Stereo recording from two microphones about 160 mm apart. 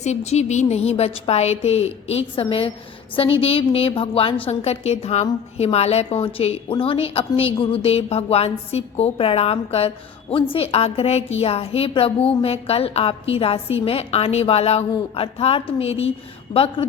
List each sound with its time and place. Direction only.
0.0 s a woman's voice: 45° left (ahead or behind)
16.5 s speech: 25° left (ahead or behind)